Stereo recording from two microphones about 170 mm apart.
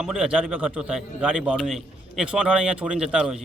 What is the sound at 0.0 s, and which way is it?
A man's voice, 5° right (ahead or behind).